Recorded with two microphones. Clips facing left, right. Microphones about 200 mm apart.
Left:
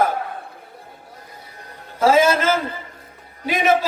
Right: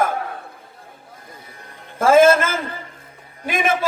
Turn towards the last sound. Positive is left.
turn(degrees=-50)  # may be behind; listen again after turning